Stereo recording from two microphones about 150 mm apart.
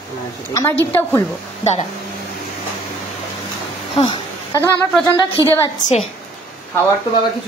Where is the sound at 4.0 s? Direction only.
35° left (ahead or behind).